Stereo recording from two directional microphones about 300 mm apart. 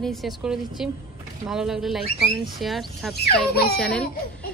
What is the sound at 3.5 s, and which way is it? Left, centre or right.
Speech, left.